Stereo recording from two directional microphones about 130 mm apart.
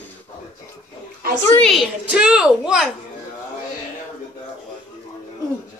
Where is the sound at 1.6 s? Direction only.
Centre (ahead or behind).